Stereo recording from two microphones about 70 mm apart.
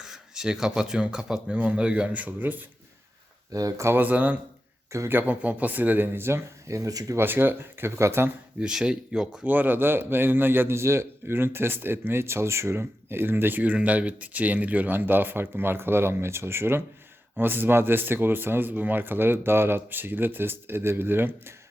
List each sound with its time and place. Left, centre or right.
0.0 s speech: centre; by 2.6 s right
3.5 s speech: right
3.9 s speech: right
4.9 s speech: right
5.1 s speech: right
7.2 s a man's voice: right
8.6 s speech: centre
9.5 s a man's voice: right